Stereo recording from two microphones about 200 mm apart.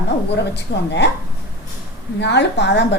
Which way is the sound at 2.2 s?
60° left (ahead or behind).